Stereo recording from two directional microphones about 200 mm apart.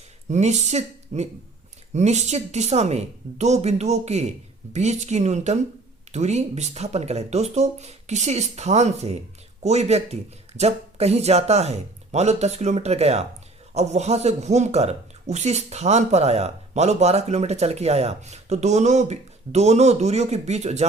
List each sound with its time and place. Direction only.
0.3 s speech: 35° right (ahead or behind)